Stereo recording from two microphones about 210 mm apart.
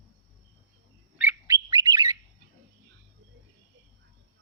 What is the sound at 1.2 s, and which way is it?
Bird, 10° right (ahead or behind).